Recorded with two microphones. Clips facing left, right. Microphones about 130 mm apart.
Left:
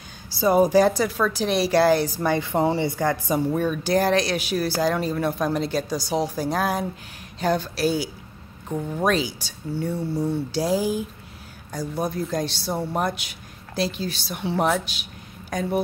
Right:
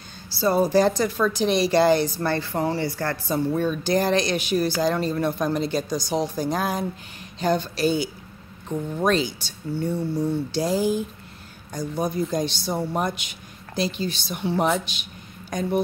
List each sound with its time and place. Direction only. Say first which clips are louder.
0.4 s speech: left 2 dB; 15° left (ahead or behind)